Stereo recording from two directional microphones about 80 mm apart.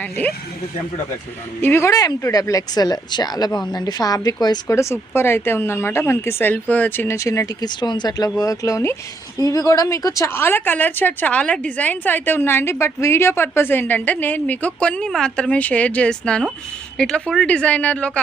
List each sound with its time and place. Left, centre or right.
1.6 s a woman's voice: left
1.9 s speech: left
4.7 s speech: left
7.2 s speech: left
7.6 s speech: left
10.3 s a woman's voice: left